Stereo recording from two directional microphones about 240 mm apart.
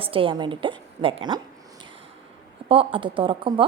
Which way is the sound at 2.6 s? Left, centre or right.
Right.